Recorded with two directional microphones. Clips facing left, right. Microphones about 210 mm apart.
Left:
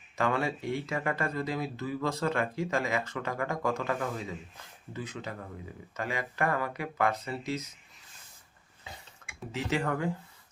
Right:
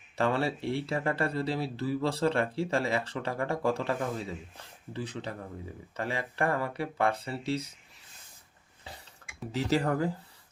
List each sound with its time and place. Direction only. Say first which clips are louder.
0.2 s speech: right 1 dB; 30° right (ahead or behind)
9.5 s speech: right 3 dB; 35° right (ahead or behind)